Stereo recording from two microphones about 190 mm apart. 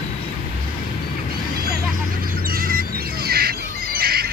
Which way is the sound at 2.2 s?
50° right (ahead or behind).